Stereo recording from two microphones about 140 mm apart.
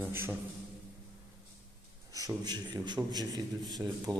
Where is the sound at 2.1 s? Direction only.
30° right (ahead or behind).